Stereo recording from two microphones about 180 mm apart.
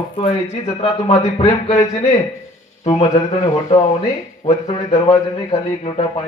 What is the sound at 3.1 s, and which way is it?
Speech, 35° left (ahead or behind).